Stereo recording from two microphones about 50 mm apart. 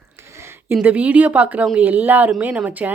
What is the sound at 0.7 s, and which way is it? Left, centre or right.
Speech, right.